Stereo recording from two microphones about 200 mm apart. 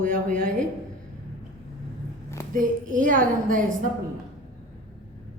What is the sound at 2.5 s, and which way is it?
A woman's voice, 40° right (ahead or behind).